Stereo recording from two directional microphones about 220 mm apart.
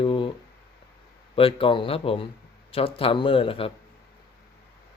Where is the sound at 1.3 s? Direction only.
25° left (ahead or behind).